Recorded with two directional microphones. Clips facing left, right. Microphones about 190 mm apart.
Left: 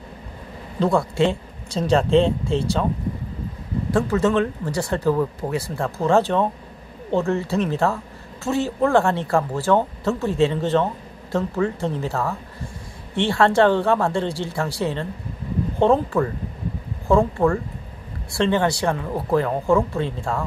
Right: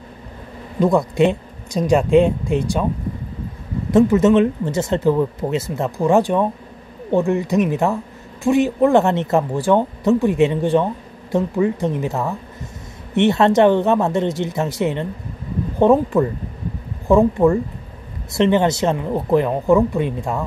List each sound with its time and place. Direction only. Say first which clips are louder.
0.7 s speech: right 4 dB; 15° right (ahead or behind)
3.9 s speech: right 7 dB; 20° right (ahead or behind)